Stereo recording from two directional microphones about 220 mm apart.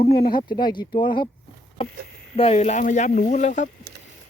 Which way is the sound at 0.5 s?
20° left (ahead or behind).